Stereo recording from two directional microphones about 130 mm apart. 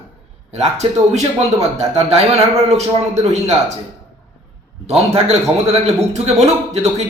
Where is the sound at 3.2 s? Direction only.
55° right (ahead or behind).